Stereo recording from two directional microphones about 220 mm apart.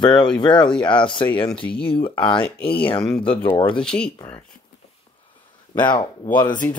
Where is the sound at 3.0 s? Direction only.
Centre (ahead or behind).